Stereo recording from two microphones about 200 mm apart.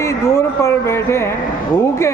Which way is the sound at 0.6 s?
15° left (ahead or behind).